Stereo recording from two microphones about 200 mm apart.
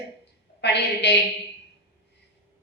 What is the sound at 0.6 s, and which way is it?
Speech, 60° left (ahead or behind).